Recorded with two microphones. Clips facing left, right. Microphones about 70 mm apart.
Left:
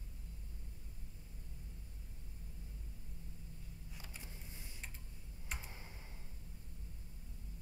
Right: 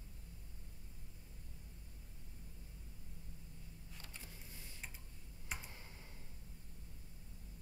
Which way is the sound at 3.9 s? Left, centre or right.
Centre.